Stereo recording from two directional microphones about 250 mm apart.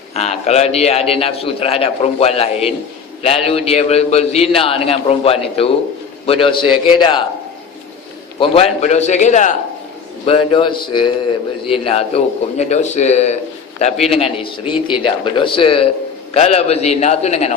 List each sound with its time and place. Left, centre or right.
0.1 s a man's voice: left
8.4 s a man's voice: left